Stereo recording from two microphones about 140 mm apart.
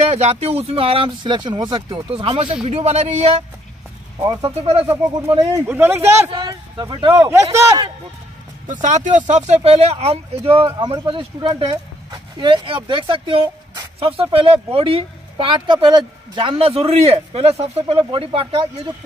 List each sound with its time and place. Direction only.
0.1 s speech: 50° right (ahead or behind)
2.7 s speech: 50° right (ahead or behind)
4.2 s speech: 25° right (ahead or behind)
5.2 s speech: 45° right (ahead or behind)
5.7 s speech: 15° right (ahead or behind)
6.3 s speech: 30° right (ahead or behind)
7.5 s speech: 20° right (ahead or behind)
8.8 s speech: 65° right (ahead or behind); by 18.5 s 40° right (ahead or behind)